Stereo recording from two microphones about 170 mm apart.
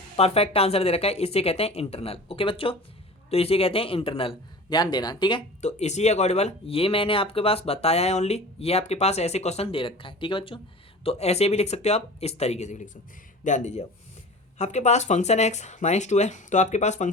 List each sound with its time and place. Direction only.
0.2 s speech: 35° left (ahead or behind)
5.6 s speech: 40° left (ahead or behind)